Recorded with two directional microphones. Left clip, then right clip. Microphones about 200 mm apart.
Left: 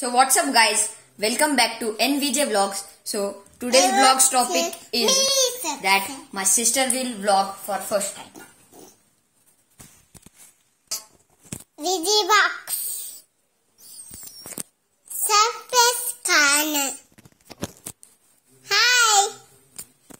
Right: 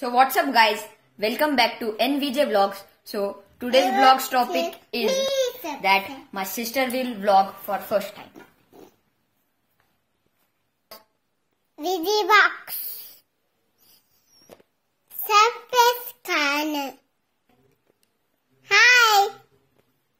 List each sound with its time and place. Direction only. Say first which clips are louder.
0.0 s a woman's voice: even; 5° right (ahead or behind)
5.3 s a sound: left 2 dB; 10° left (ahead or behind)
5.8 s a woman's voice: right 1 dB; 15° right (ahead or behind)
11.7 s a woman's voice: left 2 dB; 5° right (ahead or behind)
15.2 s a woman's voice: right 1 dB; 5° right (ahead or behind)
18.6 s babbling: right 3 dB; centre (ahead or behind)